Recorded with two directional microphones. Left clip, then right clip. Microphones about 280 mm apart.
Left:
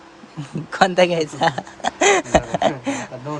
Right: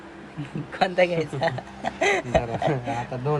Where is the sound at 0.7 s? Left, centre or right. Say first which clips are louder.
Left 6 dB; left.